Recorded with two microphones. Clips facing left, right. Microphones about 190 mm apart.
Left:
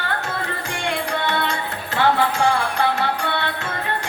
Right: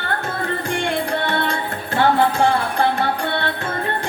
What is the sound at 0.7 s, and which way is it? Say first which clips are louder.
Music: right 2 dB; 50° right (ahead or behind).